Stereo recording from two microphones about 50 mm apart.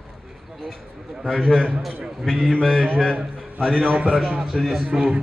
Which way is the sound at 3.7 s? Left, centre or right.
Right.